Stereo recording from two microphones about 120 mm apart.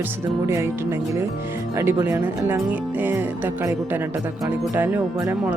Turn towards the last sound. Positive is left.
turn(degrees=-15)  # may be behind; listen again after turning